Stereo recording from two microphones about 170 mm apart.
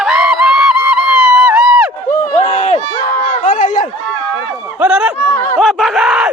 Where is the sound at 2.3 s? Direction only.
40° left (ahead or behind).